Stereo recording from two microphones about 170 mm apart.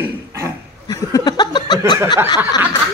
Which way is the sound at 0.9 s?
20° left (ahead or behind).